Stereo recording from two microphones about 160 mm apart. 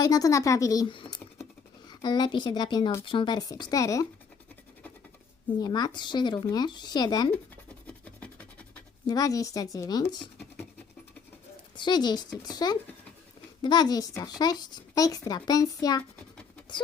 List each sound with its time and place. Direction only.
0.0 s a child's voice: 25° left (ahead or behind)
5.5 s a child's voice: 25° left (ahead or behind)
7.9 s rub: 10° left (ahead or behind)
9.0 s a child's voice: 20° left (ahead or behind)
11.8 s a child's voice: 25° left (ahead or behind)